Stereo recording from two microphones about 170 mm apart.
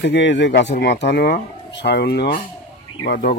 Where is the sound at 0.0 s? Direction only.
90° left.